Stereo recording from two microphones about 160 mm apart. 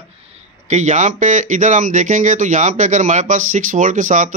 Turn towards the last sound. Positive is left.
turn(degrees=-55)  # may be behind; listen again after turning